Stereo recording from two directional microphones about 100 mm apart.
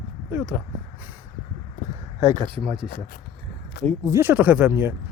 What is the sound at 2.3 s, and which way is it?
Speech, 65° right (ahead or behind).